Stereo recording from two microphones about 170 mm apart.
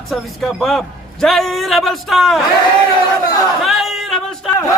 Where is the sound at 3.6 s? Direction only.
Centre (ahead or behind).